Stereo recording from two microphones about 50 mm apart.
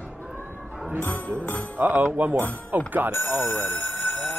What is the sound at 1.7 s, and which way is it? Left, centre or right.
Speech, right.